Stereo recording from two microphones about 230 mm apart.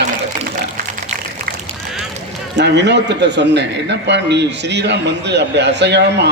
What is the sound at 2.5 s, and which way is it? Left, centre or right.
A man's voice, right.